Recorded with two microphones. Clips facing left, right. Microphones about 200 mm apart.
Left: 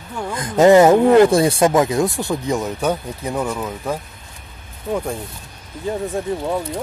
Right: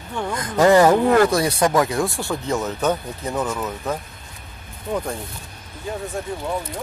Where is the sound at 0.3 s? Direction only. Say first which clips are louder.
Left 4 dB; 25° left (ahead or behind).